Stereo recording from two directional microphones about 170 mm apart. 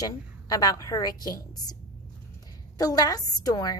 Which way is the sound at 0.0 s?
20° left (ahead or behind).